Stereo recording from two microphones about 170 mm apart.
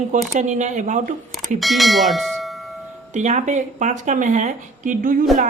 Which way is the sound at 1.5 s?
Centre (ahead or behind).